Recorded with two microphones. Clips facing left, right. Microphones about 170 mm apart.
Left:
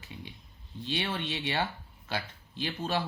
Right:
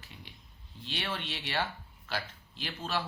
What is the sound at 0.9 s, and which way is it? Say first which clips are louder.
Speech: left 4 dB; 20° left (ahead or behind).